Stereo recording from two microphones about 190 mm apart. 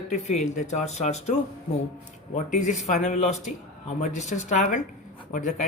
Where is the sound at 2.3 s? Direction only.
40° left (ahead or behind).